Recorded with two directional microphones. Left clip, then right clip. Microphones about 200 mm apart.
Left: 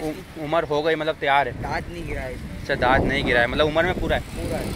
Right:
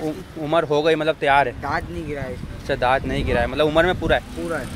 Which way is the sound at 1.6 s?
50° right (ahead or behind).